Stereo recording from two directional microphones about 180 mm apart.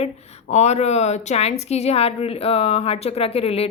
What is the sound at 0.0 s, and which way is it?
A woman's voice, 35° left (ahead or behind).